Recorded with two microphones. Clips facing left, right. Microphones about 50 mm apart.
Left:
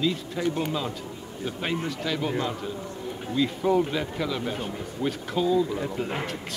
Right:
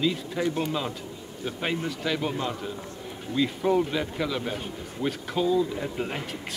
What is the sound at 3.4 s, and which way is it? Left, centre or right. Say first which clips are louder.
Speech: left 1 dB; centre.